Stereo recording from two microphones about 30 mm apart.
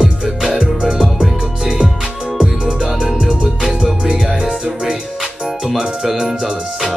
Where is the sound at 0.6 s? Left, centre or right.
Right.